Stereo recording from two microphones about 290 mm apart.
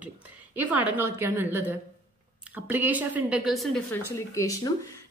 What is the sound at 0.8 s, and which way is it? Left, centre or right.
A woman's voice, centre.